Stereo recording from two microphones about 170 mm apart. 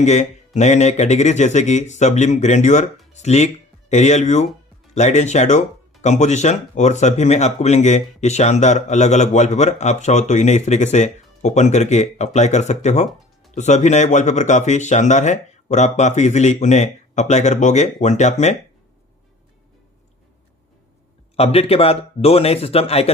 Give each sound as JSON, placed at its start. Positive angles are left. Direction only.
{"t": 0.0, "sound": "speech", "side_deg": 45}
{"t": 21.3, "sound": "speech", "side_deg": 35}